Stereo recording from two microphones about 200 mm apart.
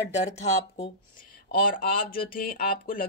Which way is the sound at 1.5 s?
45° left (ahead or behind).